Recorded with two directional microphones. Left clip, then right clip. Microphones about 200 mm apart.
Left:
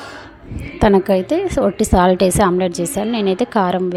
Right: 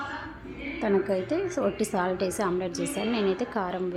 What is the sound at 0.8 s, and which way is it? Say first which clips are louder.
A woman's voice: left 13 dB; 40° left (ahead or behind).